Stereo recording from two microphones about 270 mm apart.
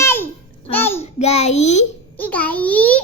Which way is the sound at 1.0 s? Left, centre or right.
Left.